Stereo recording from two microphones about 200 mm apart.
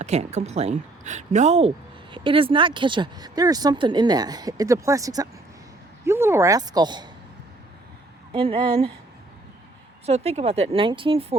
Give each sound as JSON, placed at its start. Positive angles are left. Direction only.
{"t": 0.0, "sound": "speech", "side_deg": -35}
{"t": 8.3, "sound": "speech", "side_deg": -25}
{"t": 10.1, "sound": "speech", "side_deg": -30}